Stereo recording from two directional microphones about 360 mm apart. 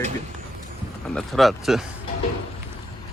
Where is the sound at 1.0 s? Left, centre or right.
Centre.